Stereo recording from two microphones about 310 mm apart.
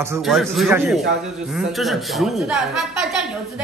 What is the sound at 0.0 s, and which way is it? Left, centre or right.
A woman's voice, centre.